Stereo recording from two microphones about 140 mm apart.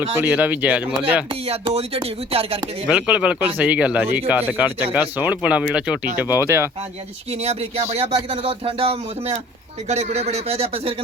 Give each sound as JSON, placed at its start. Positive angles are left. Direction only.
{"t": 0.2, "sound": "speech", "side_deg": -10}
{"t": 1.3, "sound": "speech", "side_deg": -40}
{"t": 2.8, "sound": "speech", "side_deg": -5}
{"t": 7.3, "sound": "speech", "side_deg": -50}